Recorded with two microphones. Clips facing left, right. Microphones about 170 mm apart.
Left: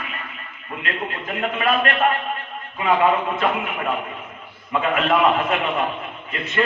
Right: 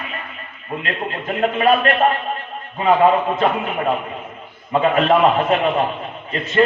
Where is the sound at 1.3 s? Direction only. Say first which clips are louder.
Right 5 dB; 30° right (ahead or behind).